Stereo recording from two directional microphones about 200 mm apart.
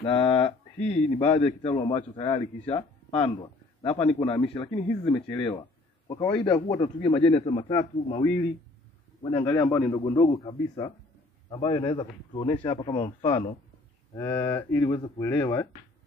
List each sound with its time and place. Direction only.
0.0 s a man's voice: 25° left (ahead or behind)
9.2 s a man's voice: 25° left (ahead or behind)
14.1 s speech: 15° left (ahead or behind)